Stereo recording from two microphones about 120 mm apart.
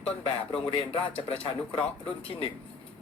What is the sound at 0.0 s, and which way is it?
Speech, 50° left (ahead or behind).